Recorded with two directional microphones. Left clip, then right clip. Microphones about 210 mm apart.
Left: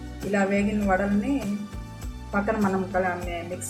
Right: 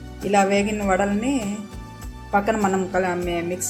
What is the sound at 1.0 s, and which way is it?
Music, centre (ahead or behind).